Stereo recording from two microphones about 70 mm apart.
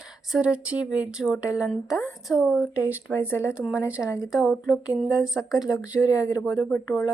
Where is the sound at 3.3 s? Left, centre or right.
Left.